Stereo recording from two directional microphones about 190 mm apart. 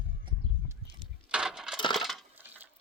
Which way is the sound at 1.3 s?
5° right (ahead or behind).